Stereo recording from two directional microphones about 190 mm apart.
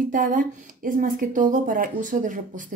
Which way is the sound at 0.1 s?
45° right (ahead or behind).